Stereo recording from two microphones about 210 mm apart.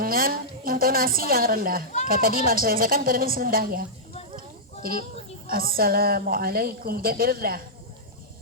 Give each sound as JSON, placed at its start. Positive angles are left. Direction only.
{"t": 0.0, "sound": "a woman's voice", "side_deg": -45}